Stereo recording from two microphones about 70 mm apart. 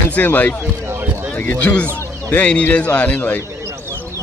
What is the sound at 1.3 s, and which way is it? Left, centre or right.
A man's voice, left.